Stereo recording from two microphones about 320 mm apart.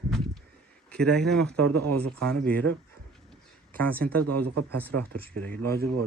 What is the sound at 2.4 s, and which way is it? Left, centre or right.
Speech, centre.